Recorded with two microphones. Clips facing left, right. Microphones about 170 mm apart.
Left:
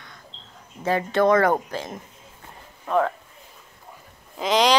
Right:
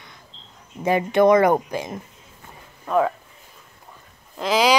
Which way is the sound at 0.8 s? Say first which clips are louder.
Right 3 dB; 15° right (ahead or behind).